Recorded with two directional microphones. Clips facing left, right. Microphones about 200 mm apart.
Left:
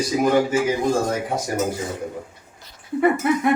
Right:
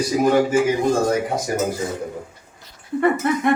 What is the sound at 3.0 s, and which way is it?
Speech, 5° left (ahead or behind).